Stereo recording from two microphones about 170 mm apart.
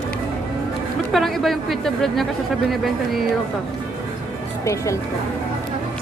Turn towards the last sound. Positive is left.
turn(degrees=20)  # may be behind; listen again after turning